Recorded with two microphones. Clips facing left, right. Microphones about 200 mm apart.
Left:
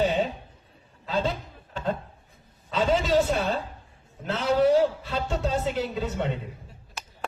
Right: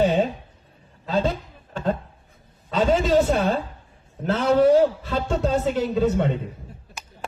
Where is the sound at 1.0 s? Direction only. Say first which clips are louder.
Right 4 dB; 45° right (ahead or behind).